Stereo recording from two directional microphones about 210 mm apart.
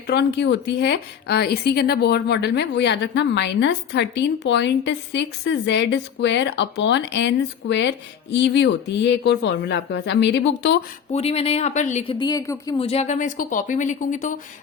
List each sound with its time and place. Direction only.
0.1 s a woman's voice: 55° left (ahead or behind)
11.1 s a woman's voice: 30° left (ahead or behind)
12.1 s a woman's voice: 20° left (ahead or behind); by 14.3 s 35° left (ahead or behind)